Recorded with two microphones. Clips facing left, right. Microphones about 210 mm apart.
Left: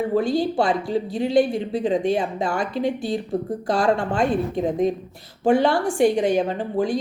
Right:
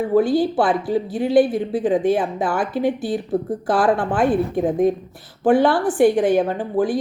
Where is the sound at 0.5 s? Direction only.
5° right (ahead or behind).